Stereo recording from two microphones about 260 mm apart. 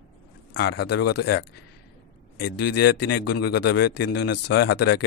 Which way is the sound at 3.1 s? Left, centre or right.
Left.